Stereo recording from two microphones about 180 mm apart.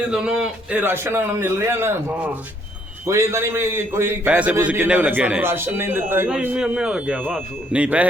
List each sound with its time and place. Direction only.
0.1 s a man's voice: 5° right (ahead or behind)